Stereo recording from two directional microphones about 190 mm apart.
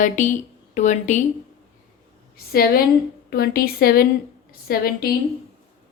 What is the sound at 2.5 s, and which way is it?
Speech, 50° left (ahead or behind).